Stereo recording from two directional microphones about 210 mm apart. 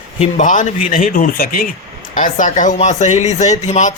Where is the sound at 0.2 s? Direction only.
35° left (ahead or behind).